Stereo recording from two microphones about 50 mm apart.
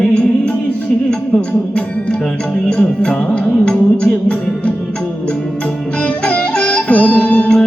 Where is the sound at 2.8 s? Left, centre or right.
Centre.